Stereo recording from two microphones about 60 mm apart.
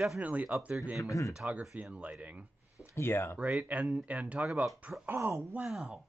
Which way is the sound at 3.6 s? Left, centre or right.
Right.